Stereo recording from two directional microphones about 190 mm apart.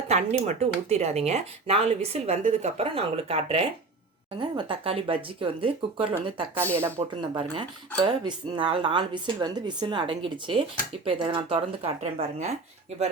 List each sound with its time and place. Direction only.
0.1 s speech: 35° right (ahead or behind)
6.7 s speech: 15° right (ahead or behind)
8.0 s speech: 25° right (ahead or behind)